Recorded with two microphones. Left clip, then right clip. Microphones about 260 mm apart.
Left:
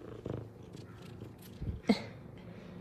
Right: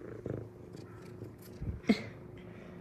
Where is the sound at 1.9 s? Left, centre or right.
Centre.